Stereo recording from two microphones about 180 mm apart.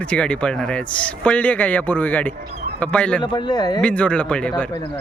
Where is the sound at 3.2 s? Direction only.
25° left (ahead or behind).